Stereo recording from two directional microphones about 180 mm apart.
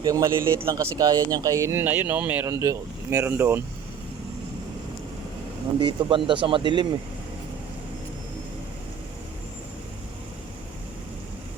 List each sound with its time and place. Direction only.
0.0 s speech: 20° right (ahead or behind)
5.8 s speech: 25° right (ahead or behind)